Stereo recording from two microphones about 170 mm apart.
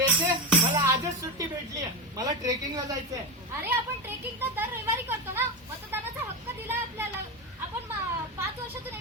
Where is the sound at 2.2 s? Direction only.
20° right (ahead or behind).